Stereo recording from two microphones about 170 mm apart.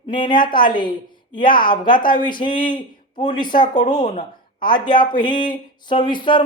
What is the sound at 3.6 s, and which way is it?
Speech, 45° left (ahead or behind).